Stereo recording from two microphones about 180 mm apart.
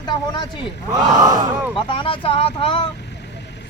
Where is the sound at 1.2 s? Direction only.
20° right (ahead or behind).